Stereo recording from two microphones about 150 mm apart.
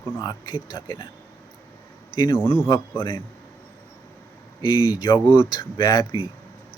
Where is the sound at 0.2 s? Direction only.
25° left (ahead or behind).